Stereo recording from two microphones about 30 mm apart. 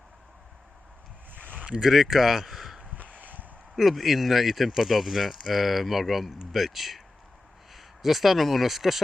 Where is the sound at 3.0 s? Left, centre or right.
Right.